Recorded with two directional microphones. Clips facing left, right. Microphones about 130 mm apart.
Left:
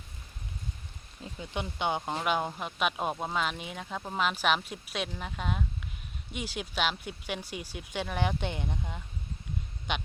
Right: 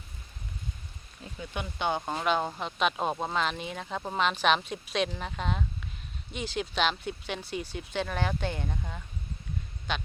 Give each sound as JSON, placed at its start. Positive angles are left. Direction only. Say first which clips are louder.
{"t": 1.4, "sound": "speech", "louder": "even", "side_deg": 20}